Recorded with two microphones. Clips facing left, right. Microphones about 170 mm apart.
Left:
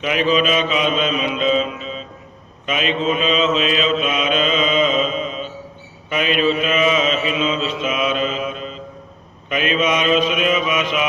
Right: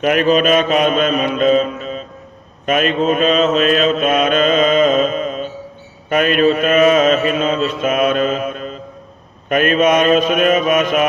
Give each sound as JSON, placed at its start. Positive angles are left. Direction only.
{"t": 0.0, "sound": "mantra", "side_deg": -50}